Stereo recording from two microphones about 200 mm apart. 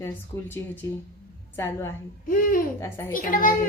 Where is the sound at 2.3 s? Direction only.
45° left (ahead or behind).